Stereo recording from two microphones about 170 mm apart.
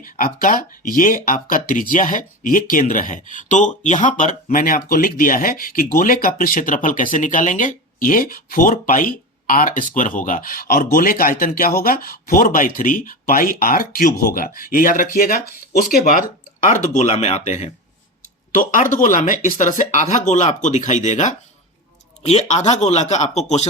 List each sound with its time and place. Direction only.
0.0 s speech: 55° left (ahead or behind); by 17.7 s 40° left (ahead or behind)
18.5 s speech: 50° left (ahead or behind)